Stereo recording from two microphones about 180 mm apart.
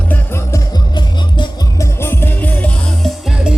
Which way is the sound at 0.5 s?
20° left (ahead or behind).